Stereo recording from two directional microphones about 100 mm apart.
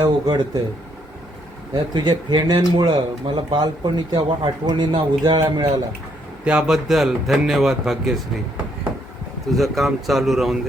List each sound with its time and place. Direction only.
0.0 s speech: 45° right (ahead or behind)
1.7 s speech: 45° right (ahead or behind)
6.4 s a man's voice: 10° right (ahead or behind)
9.5 s a man's voice: centre (ahead or behind)